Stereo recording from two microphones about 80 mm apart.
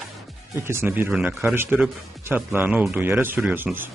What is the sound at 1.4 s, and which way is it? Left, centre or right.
Speech, right.